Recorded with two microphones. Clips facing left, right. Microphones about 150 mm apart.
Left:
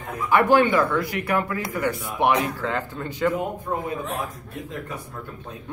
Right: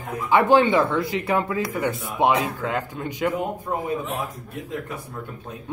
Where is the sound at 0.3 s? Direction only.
20° right (ahead or behind).